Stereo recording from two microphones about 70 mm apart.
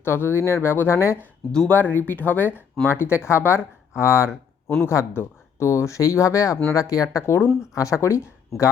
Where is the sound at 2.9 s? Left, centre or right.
Left.